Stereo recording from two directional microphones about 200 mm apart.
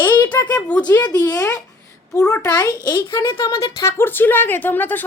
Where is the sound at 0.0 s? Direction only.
20° left (ahead or behind).